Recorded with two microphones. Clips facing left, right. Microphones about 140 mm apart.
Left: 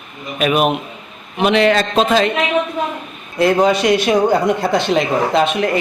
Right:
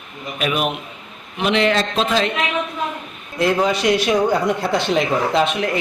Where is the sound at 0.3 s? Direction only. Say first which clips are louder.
Left 6 dB; 60° left (ahead or behind).